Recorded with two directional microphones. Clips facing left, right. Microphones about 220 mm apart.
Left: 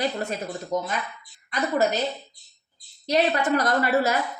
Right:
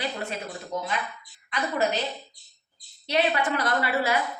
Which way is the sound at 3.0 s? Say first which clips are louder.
Left 3 dB; 40° left (ahead or behind).